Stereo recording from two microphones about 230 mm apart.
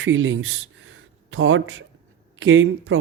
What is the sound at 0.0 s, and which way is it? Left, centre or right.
Speech, right.